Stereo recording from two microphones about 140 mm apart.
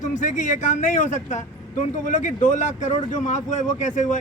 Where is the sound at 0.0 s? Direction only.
60° left (ahead or behind).